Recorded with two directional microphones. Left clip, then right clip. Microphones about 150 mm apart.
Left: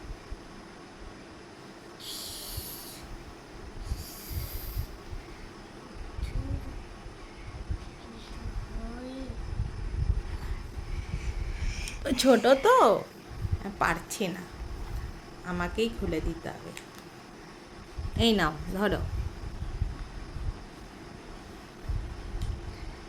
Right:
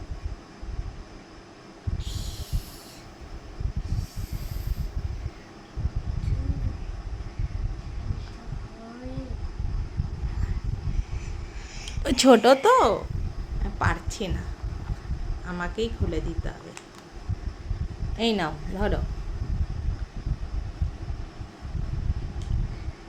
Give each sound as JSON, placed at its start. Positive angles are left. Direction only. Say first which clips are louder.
{"t": 12.0, "sound": "speech", "louder": "right 5 dB", "side_deg": -30}
{"t": 12.6, "sound": "speech", "louder": "right 2 dB", "side_deg": -5}
{"t": 13.7, "sound": "speech", "louder": "even", "side_deg": 10}
{"t": 15.4, "sound": "speech", "louder": "even", "side_deg": 10}
{"t": 18.2, "sound": "speech", "louder": "even", "side_deg": 5}